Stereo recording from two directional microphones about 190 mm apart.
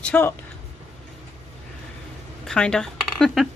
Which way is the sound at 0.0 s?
10° left (ahead or behind).